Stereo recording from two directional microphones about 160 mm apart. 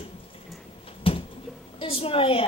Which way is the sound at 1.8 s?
35° left (ahead or behind).